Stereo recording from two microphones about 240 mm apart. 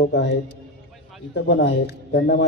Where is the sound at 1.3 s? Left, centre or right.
Left.